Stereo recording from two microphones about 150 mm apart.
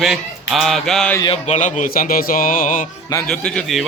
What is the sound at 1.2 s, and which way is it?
Speech, 40° left (ahead or behind).